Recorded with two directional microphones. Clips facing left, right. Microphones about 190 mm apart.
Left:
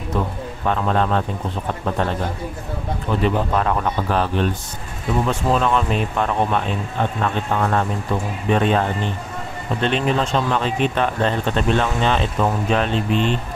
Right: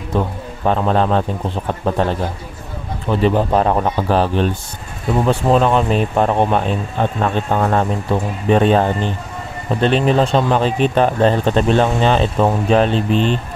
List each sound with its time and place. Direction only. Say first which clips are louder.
0.1 s speech: right 4 dB; 30° right (ahead or behind)
3.3 s speech: right 5 dB; 35° right (ahead or behind)